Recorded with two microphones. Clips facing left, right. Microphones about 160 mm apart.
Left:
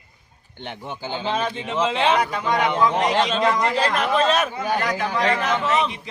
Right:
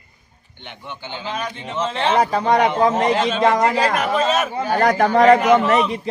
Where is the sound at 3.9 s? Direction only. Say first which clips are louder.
Right 1 dB; 5° right (ahead or behind).